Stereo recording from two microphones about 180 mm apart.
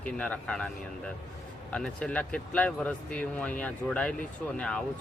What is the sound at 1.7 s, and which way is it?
Speech, 5° left (ahead or behind).